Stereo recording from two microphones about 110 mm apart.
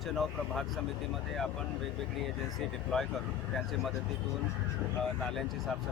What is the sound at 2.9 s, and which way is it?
Speech, 5° left (ahead or behind).